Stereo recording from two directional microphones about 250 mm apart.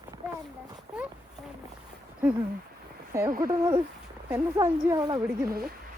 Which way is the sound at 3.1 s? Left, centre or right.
Centre.